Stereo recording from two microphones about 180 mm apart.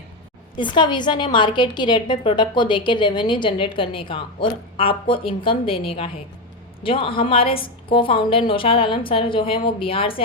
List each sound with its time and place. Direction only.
0.5 s a woman's voice: 25° left (ahead or behind)